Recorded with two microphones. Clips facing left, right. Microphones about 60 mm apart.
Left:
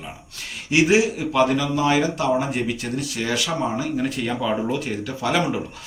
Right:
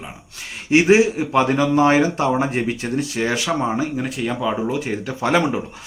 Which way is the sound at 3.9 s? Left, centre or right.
Centre.